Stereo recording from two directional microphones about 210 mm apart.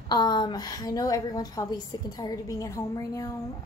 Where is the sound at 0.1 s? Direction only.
20° left (ahead or behind).